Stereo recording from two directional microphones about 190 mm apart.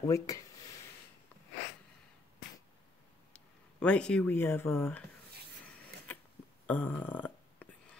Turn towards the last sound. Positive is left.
turn(degrees=10)  # may be behind; listen again after turning